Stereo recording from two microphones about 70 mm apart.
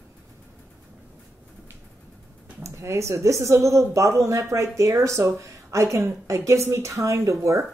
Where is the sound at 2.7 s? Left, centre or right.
Right.